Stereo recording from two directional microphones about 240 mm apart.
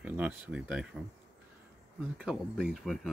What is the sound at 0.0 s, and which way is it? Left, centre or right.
Speech, centre.